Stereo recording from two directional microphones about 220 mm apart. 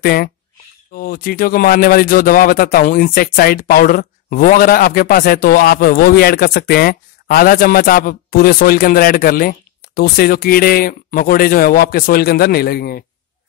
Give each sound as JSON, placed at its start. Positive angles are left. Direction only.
{"t": 0.0, "sound": "speech", "side_deg": 45}